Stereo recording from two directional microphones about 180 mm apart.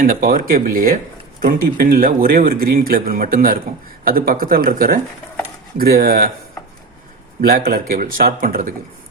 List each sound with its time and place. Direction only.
0.0 s a man's voice: 50° right (ahead or behind)
7.4 s a man's voice: 55° right (ahead or behind)